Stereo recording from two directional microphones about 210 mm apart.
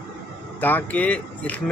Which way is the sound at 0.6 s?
10° left (ahead or behind).